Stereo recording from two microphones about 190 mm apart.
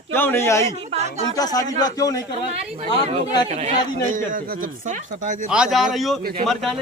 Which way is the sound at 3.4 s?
35° right (ahead or behind).